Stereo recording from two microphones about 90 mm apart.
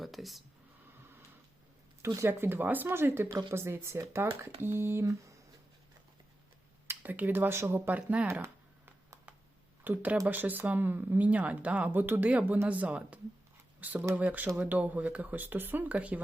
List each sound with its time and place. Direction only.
0.0 s speech: centre (ahead or behind)
2.0 s speech: 30° right (ahead or behind)
6.8 s speech: 20° right (ahead or behind)
9.8 s speech: 20° right (ahead or behind)